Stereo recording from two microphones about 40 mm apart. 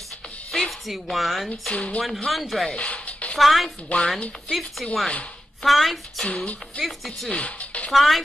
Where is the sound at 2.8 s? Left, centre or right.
Left.